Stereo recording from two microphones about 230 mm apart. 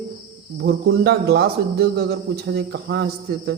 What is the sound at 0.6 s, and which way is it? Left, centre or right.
A man's voice, right.